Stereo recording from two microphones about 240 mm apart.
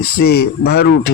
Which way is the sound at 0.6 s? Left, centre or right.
Left.